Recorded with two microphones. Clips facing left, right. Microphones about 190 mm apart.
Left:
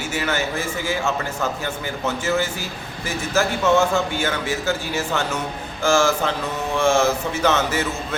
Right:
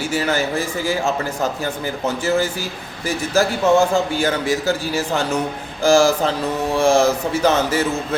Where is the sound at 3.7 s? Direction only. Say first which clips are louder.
Right 2 dB; 35° right (ahead or behind).